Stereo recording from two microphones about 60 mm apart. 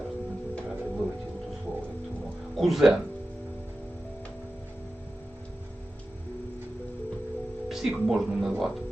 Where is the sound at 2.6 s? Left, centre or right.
Centre.